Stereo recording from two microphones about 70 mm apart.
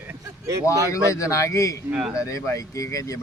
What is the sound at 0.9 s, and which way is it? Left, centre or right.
Speech, left.